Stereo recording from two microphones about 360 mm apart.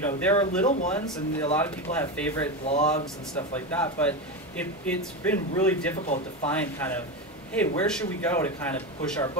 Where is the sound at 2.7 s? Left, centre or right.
Centre.